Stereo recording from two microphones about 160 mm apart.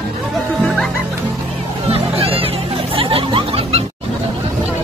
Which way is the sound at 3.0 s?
35° right (ahead or behind).